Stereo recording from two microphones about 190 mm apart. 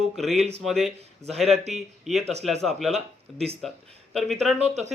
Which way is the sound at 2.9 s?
30° right (ahead or behind).